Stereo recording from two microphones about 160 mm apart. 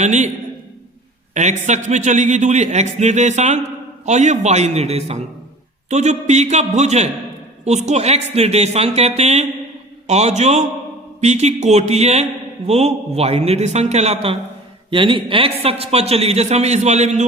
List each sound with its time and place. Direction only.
0.0 s a man's voice: 45° right (ahead or behind)
1.3 s a man's voice: 45° right (ahead or behind)